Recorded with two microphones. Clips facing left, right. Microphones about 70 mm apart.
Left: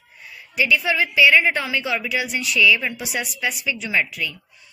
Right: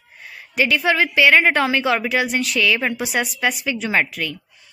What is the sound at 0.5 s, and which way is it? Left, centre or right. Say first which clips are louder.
Speech: right 2 dB; right.